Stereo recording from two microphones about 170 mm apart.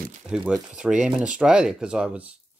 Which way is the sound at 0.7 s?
5° right (ahead or behind).